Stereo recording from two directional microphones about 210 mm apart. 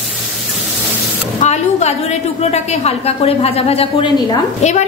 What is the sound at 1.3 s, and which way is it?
A woman's voice, 35° left (ahead or behind).